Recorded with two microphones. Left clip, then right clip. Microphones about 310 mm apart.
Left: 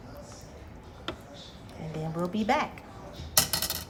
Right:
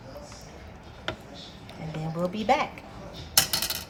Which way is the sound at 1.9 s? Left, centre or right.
Centre.